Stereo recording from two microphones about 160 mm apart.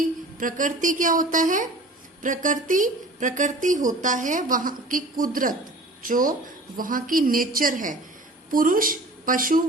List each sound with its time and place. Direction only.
0.3 s a woman's voice: 55° right (ahead or behind)